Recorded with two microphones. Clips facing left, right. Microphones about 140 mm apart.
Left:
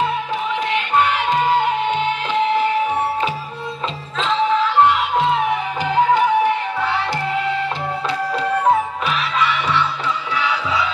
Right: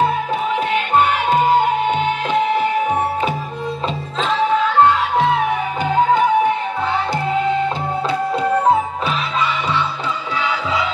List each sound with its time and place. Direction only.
6.8 s music: 25° right (ahead or behind)